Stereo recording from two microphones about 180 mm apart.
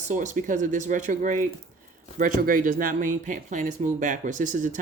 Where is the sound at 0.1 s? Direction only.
45° right (ahead or behind).